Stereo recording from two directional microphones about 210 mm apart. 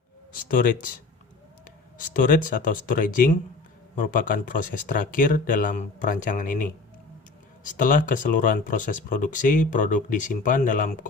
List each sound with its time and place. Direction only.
0.4 s speech: 40° left (ahead or behind)
2.0 s speech: 40° left (ahead or behind)